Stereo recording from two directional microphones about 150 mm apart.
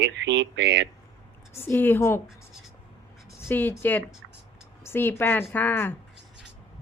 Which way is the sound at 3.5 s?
15° left (ahead or behind).